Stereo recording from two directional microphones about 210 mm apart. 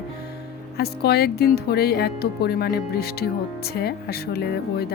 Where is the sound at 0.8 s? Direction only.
50° left (ahead or behind).